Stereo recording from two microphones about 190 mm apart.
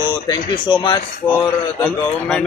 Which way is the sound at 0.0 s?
25° left (ahead or behind).